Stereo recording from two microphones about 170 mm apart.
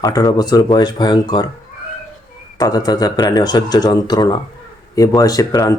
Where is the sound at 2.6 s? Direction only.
25° left (ahead or behind).